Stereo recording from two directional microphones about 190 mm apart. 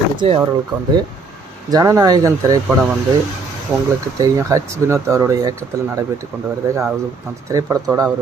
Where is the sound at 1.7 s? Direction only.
15° right (ahead or behind).